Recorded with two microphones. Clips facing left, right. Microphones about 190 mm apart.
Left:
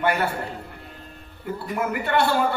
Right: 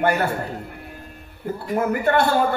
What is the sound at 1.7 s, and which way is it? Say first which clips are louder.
Speech: right 4 dB; 45° right (ahead or behind).